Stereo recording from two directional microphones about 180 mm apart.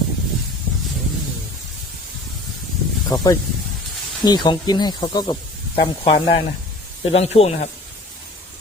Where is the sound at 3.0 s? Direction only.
20° left (ahead or behind); by 7.6 s 35° left (ahead or behind).